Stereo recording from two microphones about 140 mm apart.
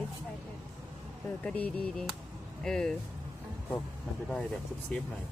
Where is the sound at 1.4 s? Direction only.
10° left (ahead or behind).